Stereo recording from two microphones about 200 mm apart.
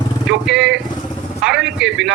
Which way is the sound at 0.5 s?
65° right (ahead or behind).